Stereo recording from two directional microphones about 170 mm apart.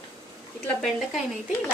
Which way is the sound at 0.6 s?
Centre (ahead or behind).